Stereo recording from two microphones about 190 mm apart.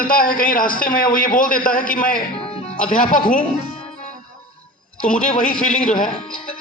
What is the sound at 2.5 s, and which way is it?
Music, 30° left (ahead or behind).